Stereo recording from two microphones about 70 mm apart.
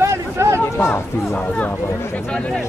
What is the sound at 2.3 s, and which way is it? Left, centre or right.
Speech, centre.